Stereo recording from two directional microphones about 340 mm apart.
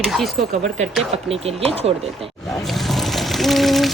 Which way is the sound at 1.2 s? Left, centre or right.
Centre.